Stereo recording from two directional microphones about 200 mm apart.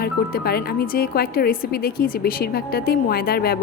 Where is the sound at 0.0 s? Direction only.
50° left (ahead or behind).